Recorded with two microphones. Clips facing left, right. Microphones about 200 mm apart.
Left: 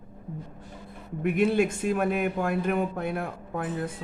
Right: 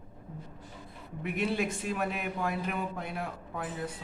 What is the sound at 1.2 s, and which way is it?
Speech, 50° left (ahead or behind).